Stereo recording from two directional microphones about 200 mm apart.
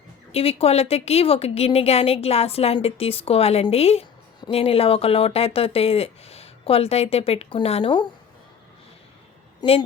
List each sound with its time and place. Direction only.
0.3 s a woman's voice: 30° left (ahead or behind)
9.6 s speech: 30° left (ahead or behind)